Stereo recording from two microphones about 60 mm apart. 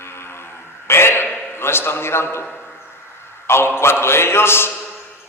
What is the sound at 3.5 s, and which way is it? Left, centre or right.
A man's voice, left.